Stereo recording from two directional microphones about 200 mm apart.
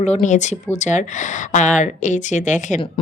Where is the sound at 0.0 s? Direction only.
35° left (ahead or behind).